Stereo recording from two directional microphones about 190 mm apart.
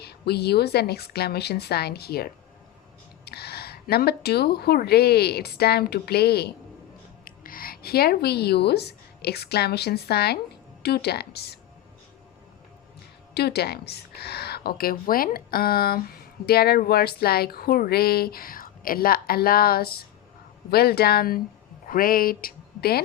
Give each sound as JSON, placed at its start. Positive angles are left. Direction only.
{"t": 0.0, "sound": "speech", "side_deg": 60}
{"t": 13.3, "sound": "speech", "side_deg": 60}